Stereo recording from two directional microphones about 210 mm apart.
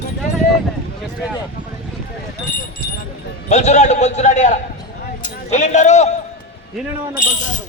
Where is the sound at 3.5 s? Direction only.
35° left (ahead or behind).